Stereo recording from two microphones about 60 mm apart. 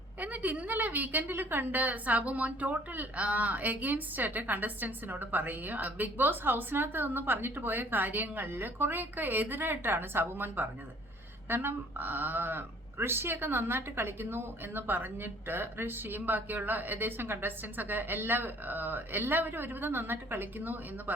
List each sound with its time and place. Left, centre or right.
0.2 s a woman's voice: right